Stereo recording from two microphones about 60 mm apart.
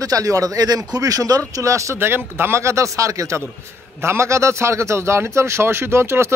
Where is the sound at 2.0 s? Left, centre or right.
Right.